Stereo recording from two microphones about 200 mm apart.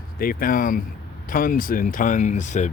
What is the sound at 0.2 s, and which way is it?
Speech, 45° left (ahead or behind).